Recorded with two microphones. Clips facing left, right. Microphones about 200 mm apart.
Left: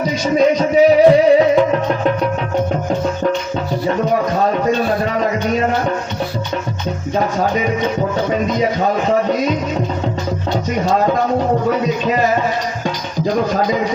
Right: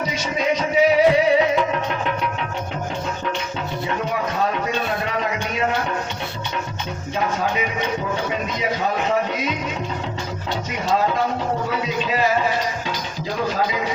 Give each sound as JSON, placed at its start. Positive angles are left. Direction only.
{"t": 0.0, "sound": "music", "side_deg": 35}
{"t": 4.6, "sound": "music", "side_deg": 40}
{"t": 7.2, "sound": "speech", "side_deg": 40}
{"t": 13.2, "sound": "a man's voice", "side_deg": 45}